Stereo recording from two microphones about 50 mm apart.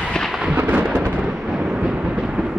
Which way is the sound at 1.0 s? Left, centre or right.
Centre.